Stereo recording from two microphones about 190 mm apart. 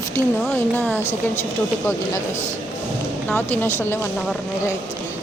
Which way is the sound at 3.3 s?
10° left (ahead or behind).